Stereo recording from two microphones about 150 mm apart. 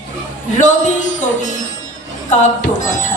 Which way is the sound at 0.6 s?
55° left (ahead or behind).